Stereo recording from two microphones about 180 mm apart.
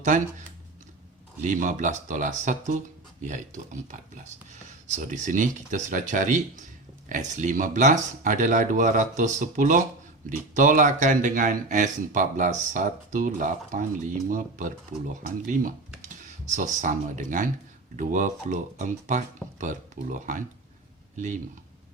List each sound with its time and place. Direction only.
1.4 s speech: 45° right (ahead or behind)
16.0 s speech: 45° right (ahead or behind)